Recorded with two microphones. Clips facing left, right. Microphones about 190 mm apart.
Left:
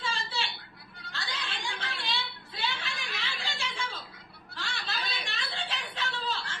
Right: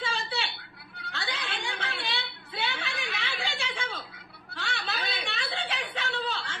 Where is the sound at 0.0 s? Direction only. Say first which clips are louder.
Right 2 dB; 60° right (ahead or behind).